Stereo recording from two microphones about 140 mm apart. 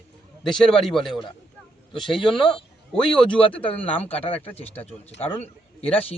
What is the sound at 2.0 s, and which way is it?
Speech, 40° left (ahead or behind).